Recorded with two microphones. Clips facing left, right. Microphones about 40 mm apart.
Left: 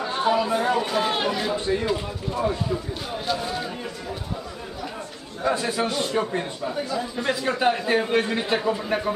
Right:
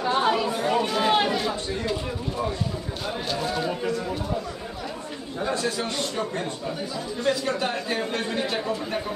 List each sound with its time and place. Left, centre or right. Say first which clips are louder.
0.0 s chatter: even; centre
0.7 s chatter: right 1 dB; centre
3.3 s speech: even; centre
5.5 s a man's voice: left 4 dB; centre